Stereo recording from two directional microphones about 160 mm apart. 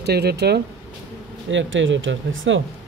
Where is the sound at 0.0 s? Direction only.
90° right.